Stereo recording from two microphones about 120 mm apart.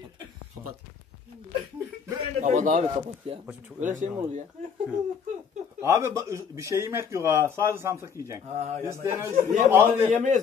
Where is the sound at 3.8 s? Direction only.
90° right.